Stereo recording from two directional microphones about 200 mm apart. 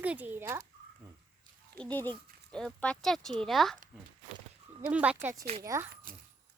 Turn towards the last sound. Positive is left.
turn(degrees=-45)  # may be behind; listen again after turning